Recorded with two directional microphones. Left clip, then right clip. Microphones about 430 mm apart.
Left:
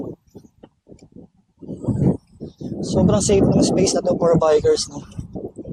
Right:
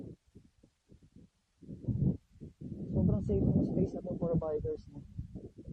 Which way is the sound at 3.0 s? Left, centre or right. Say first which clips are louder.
Left 18 dB; centre.